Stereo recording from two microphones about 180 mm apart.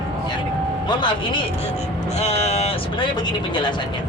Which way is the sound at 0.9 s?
25° left (ahead or behind).